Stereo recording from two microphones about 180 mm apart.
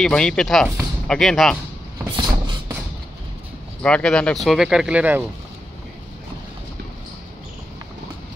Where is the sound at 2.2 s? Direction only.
25° right (ahead or behind).